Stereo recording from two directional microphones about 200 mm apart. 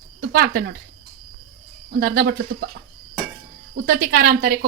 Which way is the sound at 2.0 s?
50° right (ahead or behind).